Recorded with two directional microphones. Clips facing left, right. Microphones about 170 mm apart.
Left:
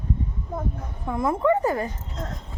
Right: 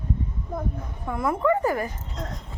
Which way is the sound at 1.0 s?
20° left (ahead or behind).